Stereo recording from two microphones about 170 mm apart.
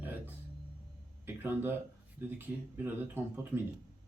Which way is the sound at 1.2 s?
10° right (ahead or behind).